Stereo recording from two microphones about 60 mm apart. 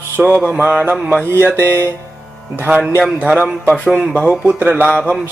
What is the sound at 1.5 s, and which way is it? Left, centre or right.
Music, right.